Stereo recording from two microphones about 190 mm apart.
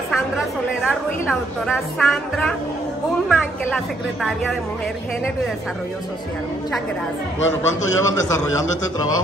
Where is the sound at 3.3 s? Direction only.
Centre (ahead or behind).